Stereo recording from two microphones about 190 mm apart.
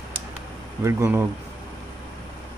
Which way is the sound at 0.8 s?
15° right (ahead or behind).